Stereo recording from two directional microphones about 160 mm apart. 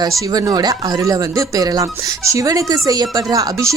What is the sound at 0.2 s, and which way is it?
Speech, 20° right (ahead or behind).